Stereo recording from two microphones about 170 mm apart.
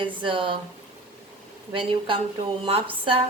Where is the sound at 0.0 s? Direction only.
30° right (ahead or behind).